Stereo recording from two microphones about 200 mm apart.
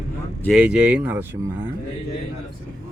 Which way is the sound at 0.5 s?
5° right (ahead or behind).